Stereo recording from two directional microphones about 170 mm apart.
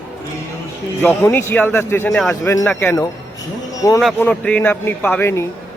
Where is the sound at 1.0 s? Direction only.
15° left (ahead or behind).